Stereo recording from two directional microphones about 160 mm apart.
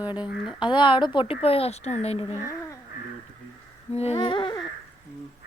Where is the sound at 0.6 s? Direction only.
30° left (ahead or behind).